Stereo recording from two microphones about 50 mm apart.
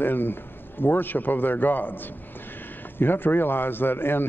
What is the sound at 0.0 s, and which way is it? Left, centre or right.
A man's voice, left.